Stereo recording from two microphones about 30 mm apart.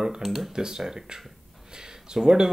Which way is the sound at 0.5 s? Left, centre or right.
Right.